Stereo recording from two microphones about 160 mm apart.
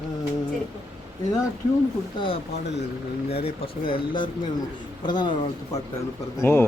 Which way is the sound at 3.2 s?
40° left (ahead or behind).